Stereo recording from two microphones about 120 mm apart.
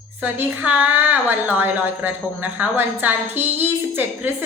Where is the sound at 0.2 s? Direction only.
15° right (ahead or behind).